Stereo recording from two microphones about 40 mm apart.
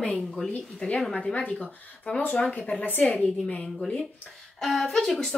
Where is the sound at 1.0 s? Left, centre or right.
Centre.